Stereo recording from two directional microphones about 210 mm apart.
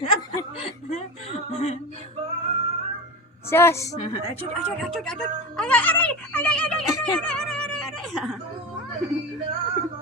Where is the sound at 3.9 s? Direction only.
30° left (ahead or behind).